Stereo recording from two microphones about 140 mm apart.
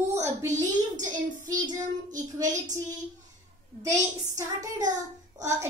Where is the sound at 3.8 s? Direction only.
25° right (ahead or behind).